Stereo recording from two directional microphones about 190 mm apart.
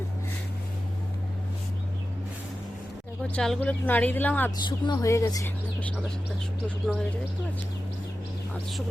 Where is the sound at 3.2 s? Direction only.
5° left (ahead or behind).